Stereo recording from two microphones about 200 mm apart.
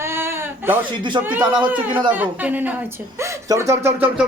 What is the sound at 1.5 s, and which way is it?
Speech, 25° right (ahead or behind).